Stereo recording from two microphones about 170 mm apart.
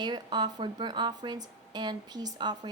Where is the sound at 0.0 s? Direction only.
25° right (ahead or behind).